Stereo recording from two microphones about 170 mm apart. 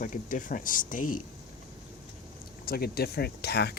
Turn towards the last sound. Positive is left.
turn(degrees=75)  # may be behind; listen again after turning